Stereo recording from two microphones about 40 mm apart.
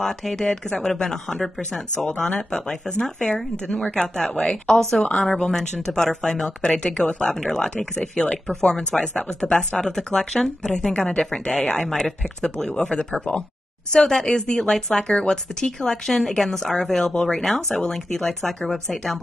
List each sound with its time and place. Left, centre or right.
0.0 s speech: centre
6.4 s speech: left
11.9 s speech: centre
15.9 s speech: centre